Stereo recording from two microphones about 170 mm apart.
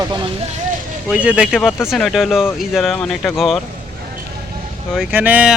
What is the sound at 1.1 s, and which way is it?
Speech, 5° right (ahead or behind).